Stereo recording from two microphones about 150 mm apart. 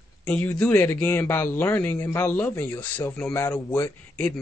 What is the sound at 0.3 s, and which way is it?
A man's voice, 10° left (ahead or behind).